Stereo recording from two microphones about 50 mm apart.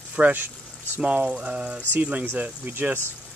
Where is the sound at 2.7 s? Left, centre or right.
Right.